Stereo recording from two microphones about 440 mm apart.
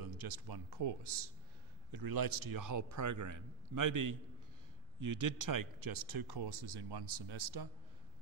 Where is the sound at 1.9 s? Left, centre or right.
Right.